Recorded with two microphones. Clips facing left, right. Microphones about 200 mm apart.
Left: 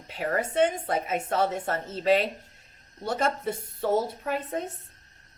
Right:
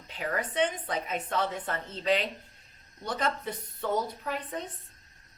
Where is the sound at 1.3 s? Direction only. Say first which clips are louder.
Left 5 dB; 45° left (ahead or behind).